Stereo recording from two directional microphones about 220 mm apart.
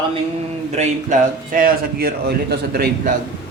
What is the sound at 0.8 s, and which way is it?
A man's voice, 30° right (ahead or behind).